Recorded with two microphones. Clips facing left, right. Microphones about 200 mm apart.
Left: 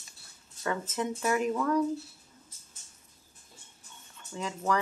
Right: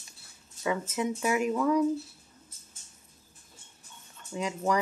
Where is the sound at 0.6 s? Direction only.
10° right (ahead or behind).